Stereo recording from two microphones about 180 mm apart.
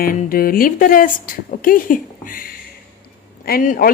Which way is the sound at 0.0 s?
50° left (ahead or behind).